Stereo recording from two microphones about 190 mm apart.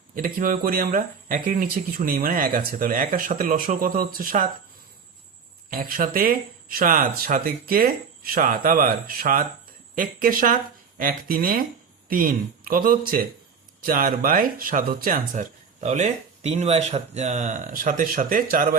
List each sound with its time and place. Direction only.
0.2 s speech: 50° right (ahead or behind)
5.7 s speech: 50° right (ahead or behind)